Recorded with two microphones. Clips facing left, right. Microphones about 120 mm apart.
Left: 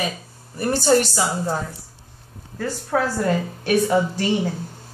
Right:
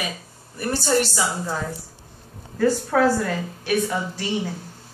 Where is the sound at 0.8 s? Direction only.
35° left (ahead or behind).